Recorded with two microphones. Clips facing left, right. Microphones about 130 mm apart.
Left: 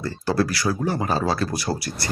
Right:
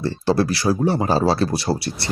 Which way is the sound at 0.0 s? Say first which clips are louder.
Right 3 dB; 25° right (ahead or behind).